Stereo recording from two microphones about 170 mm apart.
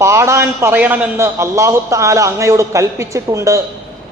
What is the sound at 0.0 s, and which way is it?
A man's voice, 15° right (ahead or behind).